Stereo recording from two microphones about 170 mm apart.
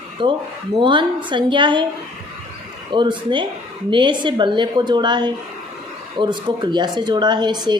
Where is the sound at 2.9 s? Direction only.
30° right (ahead or behind).